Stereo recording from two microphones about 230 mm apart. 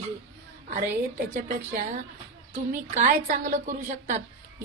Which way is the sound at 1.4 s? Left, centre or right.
Right.